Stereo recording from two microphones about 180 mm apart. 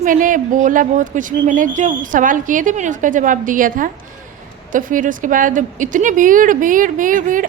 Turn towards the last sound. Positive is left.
turn(degrees=-50)  # may be behind; listen again after turning